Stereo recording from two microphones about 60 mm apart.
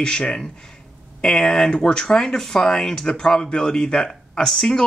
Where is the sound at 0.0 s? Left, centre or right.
Centre.